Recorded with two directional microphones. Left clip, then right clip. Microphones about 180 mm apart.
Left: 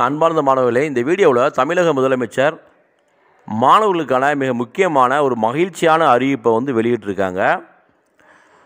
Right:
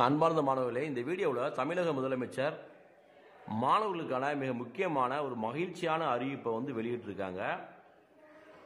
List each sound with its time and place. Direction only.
0.0 s a man's voice: 40° left (ahead or behind); by 7.6 s 55° left (ahead or behind)